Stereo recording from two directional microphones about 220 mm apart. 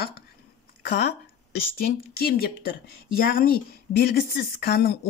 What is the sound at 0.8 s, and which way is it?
Speech, 45° left (ahead or behind).